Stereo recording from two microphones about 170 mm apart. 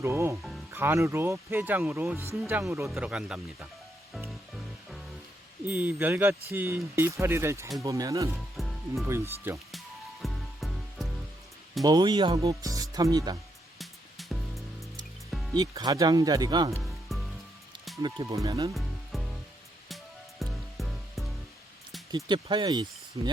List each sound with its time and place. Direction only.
0.0 s speech: 15° right (ahead or behind)
4.3 s music: centre (ahead or behind)
5.6 s speech: 10° right (ahead or behind)
8.3 s music: centre (ahead or behind)
9.0 s speech: 15° right (ahead or behind)
9.7 s music: centre (ahead or behind)
11.8 s speech: 25° right (ahead or behind)
13.7 s music: centre (ahead or behind)
15.5 s speech: 25° right (ahead or behind)
16.8 s music: centre (ahead or behind)
18.0 s speech: 25° right (ahead or behind)
18.7 s music: centre (ahead or behind)
20.4 s music: centre (ahead or behind)
22.1 s speech: 25° right (ahead or behind)